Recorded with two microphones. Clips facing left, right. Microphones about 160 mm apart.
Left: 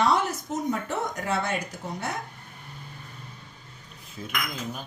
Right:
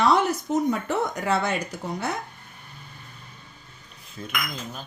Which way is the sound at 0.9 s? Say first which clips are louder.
Right 4 dB; 80° right.